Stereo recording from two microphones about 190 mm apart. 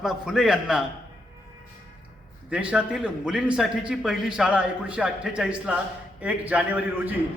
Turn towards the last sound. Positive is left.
turn(degrees=-10)  # may be behind; listen again after turning